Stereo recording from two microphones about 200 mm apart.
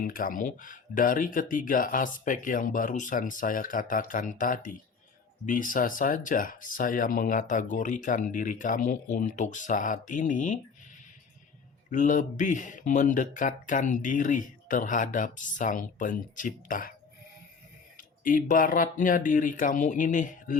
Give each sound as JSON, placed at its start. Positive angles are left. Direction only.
{"t": 0.0, "sound": "speech", "side_deg": 45}
{"t": 11.9, "sound": "speech", "side_deg": 40}
{"t": 17.9, "sound": "speech", "side_deg": 40}